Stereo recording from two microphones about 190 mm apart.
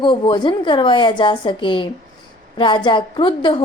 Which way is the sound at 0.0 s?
25° left (ahead or behind).